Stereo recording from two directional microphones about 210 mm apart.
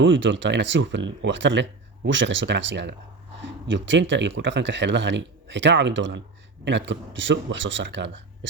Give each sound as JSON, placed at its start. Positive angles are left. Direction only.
{"t": 0.0, "sound": "speech", "side_deg": -60}